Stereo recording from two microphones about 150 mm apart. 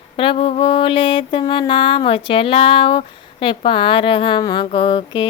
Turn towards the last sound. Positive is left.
turn(degrees=35)  # may be behind; listen again after turning